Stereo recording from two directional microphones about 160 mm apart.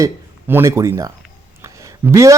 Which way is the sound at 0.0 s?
15° right (ahead or behind).